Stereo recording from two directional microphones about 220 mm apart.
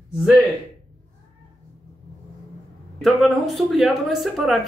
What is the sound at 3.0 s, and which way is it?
Speech, centre (ahead or behind).